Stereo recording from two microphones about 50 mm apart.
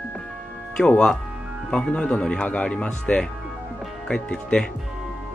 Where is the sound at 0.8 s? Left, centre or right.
Centre.